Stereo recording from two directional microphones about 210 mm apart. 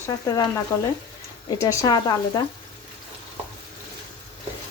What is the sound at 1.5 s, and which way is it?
Speech, 15° left (ahead or behind).